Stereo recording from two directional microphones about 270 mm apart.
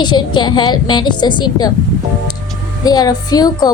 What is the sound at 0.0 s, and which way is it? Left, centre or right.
Speech, centre.